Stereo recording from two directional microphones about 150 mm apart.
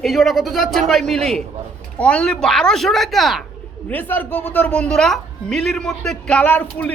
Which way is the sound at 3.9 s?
10° left (ahead or behind).